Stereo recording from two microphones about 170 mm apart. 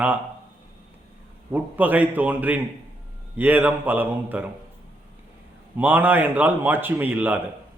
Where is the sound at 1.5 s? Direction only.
10° right (ahead or behind).